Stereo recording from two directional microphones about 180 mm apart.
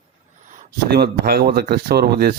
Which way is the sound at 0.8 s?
60° right (ahead or behind).